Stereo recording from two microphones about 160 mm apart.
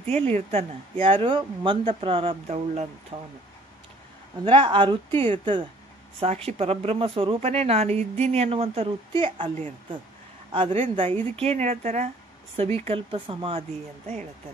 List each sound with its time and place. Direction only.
0.0 s speech: 40° right (ahead or behind)
4.5 s speech: 30° right (ahead or behind)
10.5 s speech: 35° right (ahead or behind)